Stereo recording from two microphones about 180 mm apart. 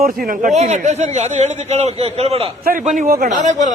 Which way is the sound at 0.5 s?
40° right (ahead or behind).